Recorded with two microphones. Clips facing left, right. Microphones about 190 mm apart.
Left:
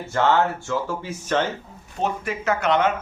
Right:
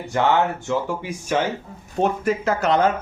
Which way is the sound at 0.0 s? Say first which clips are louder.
Right 1 dB; 15° right (ahead or behind).